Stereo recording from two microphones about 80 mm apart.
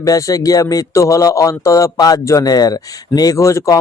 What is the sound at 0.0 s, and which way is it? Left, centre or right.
Speech, left.